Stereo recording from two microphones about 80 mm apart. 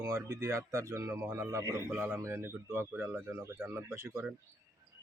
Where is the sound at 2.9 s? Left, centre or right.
Centre.